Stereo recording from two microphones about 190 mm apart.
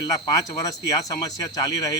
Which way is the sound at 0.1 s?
20° left (ahead or behind).